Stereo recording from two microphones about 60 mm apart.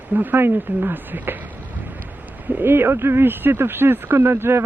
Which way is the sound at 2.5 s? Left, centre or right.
Right.